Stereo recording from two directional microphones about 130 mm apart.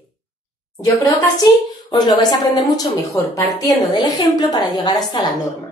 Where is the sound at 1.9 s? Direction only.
35° left (ahead or behind).